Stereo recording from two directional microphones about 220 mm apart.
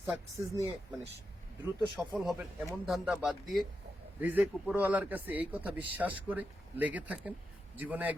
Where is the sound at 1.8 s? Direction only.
Centre (ahead or behind).